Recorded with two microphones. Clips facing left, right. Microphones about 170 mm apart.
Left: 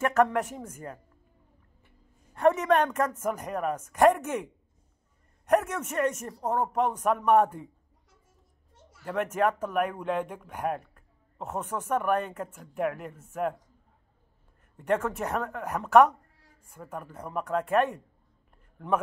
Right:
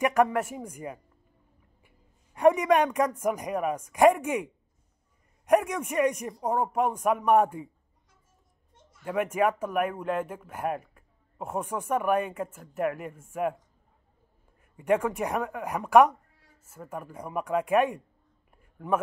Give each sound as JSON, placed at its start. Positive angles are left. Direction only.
{"t": 0.0, "sound": "a man's voice", "side_deg": -10}
{"t": 5.5, "sound": "speech", "side_deg": -10}
{"t": 9.0, "sound": "speech", "side_deg": -10}
{"t": 14.6, "sound": "speech", "side_deg": -10}
{"t": 18.6, "sound": "a sound", "side_deg": -5}